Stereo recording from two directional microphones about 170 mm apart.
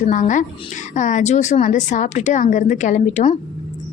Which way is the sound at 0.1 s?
50° left (ahead or behind).